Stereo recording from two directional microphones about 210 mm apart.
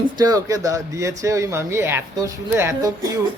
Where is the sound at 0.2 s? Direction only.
15° right (ahead or behind).